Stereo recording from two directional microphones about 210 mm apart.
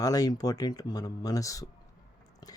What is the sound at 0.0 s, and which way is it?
Speech, 20° left (ahead or behind).